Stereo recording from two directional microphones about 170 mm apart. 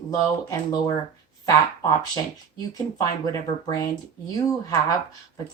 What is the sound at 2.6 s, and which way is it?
Speech, 20° left (ahead or behind).